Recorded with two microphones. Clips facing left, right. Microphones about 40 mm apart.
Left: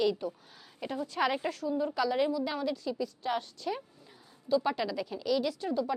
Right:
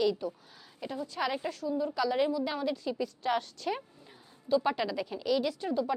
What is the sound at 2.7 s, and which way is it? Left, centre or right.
Speech, right.